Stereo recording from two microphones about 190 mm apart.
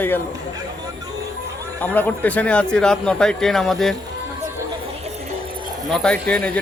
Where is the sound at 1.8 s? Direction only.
10° left (ahead or behind).